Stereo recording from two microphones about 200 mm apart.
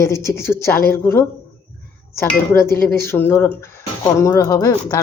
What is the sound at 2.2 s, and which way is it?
Speech, 15° left (ahead or behind).